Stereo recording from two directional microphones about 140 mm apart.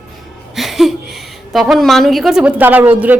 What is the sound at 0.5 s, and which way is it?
A woman's voice, centre (ahead or behind).